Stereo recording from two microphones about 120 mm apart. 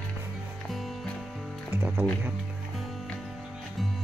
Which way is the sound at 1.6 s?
15° right (ahead or behind).